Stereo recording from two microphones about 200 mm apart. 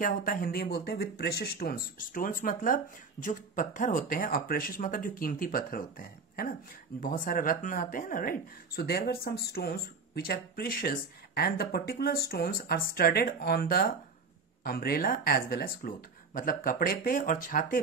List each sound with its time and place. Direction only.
0.0 s speech: 45° left (ahead or behind)